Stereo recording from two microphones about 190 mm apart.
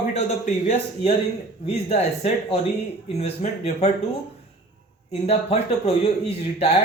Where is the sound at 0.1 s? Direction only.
40° left (ahead or behind).